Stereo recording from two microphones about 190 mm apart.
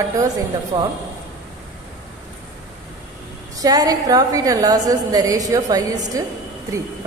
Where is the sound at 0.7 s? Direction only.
15° right (ahead or behind).